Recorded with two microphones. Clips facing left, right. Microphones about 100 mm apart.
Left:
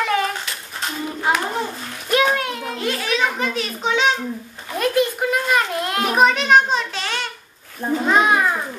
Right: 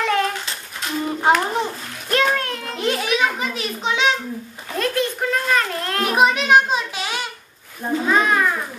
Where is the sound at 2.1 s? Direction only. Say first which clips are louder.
Left 1 dB; 10° left (ahead or behind).